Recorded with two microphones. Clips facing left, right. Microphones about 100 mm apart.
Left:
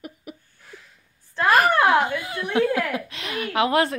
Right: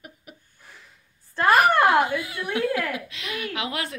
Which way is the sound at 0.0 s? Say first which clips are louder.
Left 7 dB; 75° left (ahead or behind).